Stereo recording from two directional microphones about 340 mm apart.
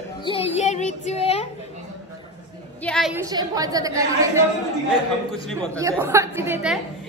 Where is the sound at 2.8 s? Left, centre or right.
Centre.